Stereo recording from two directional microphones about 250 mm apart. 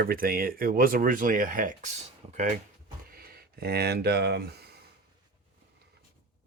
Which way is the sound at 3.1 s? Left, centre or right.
Right.